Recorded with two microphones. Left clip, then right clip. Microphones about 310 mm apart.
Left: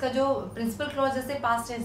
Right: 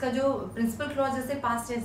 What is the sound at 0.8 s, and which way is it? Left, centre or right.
Speech, centre.